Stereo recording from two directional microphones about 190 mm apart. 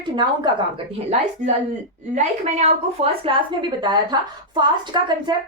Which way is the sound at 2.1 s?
35° right (ahead or behind).